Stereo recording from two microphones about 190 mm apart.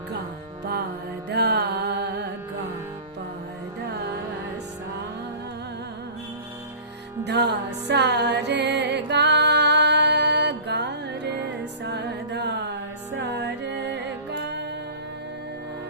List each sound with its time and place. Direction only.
1.3 s music: 60° right (ahead or behind)
7.3 s music: 65° right (ahead or behind)